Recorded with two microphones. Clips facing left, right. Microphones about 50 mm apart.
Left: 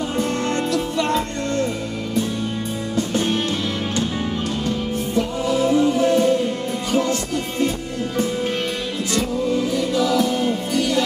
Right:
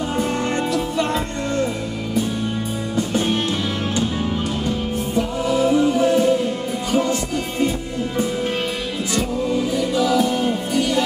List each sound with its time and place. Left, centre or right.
0.2 s music: centre
3.0 s music: centre
4.6 s music: centre
9.1 s music: centre